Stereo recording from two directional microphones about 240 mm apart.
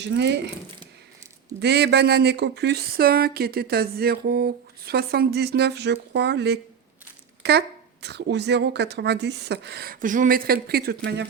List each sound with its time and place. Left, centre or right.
0.0 s speech: right
1.5 s speech: right